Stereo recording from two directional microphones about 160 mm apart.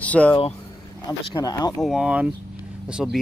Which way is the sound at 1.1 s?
25° left (ahead or behind).